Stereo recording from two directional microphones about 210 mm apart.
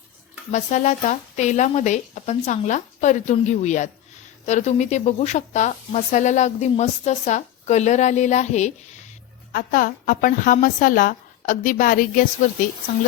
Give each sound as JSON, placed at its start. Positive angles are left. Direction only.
{"t": 0.5, "sound": "speech", "side_deg": 35}